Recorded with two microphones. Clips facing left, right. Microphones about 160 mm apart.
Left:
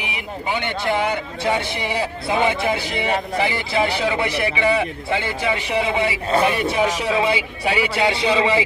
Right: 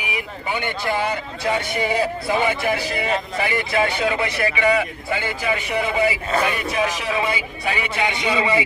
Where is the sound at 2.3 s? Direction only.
20° left (ahead or behind).